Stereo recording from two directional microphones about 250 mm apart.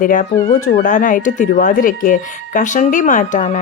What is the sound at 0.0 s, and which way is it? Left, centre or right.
Speech, left.